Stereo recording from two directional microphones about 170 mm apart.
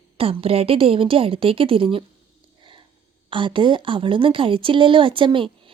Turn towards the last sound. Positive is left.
turn(degrees=-30)  # may be behind; listen again after turning